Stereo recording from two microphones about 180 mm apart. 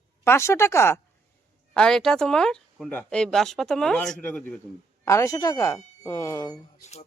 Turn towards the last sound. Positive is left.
turn(degrees=15)  # may be behind; listen again after turning